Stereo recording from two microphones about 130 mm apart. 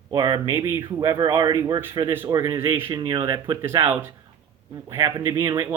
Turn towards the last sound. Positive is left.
turn(degrees=-25)  # may be behind; listen again after turning